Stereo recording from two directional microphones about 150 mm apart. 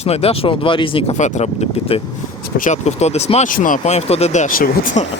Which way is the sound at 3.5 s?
65° left (ahead or behind).